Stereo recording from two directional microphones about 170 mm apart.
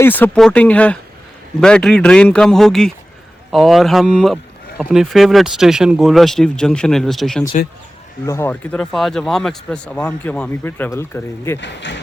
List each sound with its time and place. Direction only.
0.0 s speech: 10° left (ahead or behind)
8.3 s speech: 15° left (ahead or behind)
11.6 s speech: 90° left